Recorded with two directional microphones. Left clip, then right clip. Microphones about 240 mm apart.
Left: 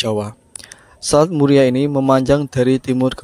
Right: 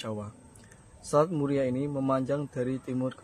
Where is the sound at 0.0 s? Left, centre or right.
Left.